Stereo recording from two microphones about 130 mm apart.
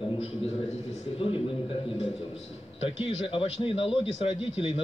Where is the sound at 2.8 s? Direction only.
45° left (ahead or behind).